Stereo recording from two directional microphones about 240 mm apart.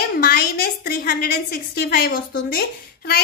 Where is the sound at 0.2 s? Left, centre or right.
Left.